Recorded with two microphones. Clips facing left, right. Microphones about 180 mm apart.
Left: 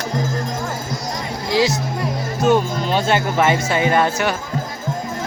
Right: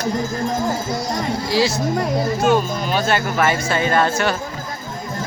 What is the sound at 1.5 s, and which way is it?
Speech, 20° left (ahead or behind).